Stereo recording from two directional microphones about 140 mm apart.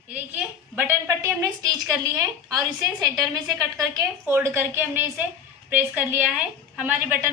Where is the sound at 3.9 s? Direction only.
20° right (ahead or behind).